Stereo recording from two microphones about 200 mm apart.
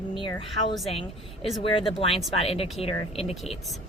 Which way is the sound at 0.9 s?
25° left (ahead or behind).